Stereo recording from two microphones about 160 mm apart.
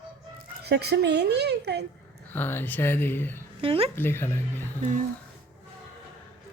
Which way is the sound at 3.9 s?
15° left (ahead or behind).